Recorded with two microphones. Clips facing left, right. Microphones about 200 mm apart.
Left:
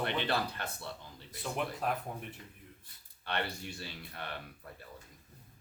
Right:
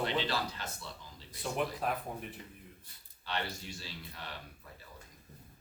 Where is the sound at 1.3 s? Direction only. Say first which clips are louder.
Right 2 dB; centre (ahead or behind).